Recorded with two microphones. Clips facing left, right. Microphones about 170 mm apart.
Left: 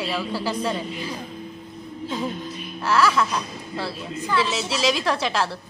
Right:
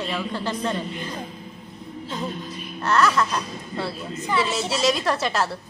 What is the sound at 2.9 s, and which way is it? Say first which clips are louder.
A woman's voice: even; 5° left (ahead or behind).